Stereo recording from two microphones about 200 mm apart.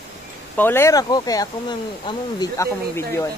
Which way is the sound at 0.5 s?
10° left (ahead or behind).